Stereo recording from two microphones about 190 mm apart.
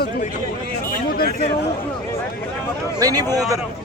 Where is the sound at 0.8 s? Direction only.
50° left (ahead or behind).